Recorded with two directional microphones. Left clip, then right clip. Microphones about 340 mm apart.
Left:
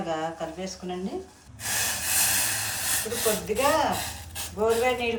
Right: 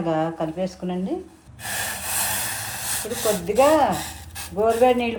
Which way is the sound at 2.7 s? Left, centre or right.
Centre.